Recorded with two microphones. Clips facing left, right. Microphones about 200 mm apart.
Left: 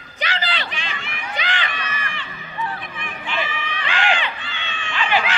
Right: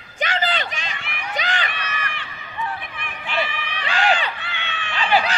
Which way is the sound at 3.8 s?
40° right (ahead or behind).